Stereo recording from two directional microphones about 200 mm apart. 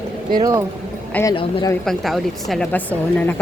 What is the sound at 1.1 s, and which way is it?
Speech, 10° left (ahead or behind).